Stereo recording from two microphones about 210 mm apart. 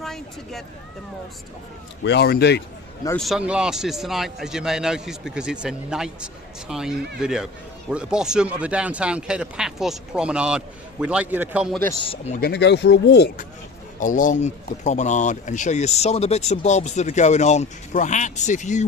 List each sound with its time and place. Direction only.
0.0 s a sound: centre (ahead or behind)
2.0 s speech: 50° left (ahead or behind)
3.2 s speech: centre (ahead or behind)
12.0 s speech: 30° left (ahead or behind)
12.4 s speech: 55° left (ahead or behind)
14.0 s speech: 40° left (ahead or behind)